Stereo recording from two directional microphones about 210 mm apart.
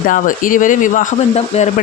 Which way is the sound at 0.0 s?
40° left (ahead or behind).